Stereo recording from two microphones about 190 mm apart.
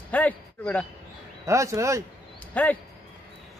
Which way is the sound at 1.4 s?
15° right (ahead or behind).